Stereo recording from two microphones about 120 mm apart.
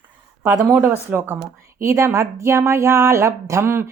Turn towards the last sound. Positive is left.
turn(degrees=-20)  # may be behind; listen again after turning